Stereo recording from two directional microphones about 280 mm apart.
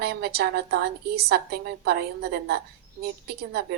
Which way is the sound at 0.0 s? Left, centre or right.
Right.